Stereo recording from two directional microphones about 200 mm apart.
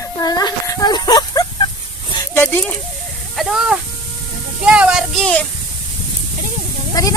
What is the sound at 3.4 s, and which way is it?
Speech, centre (ahead or behind).